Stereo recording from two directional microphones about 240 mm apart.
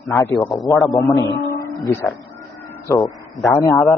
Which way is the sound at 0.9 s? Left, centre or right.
Centre.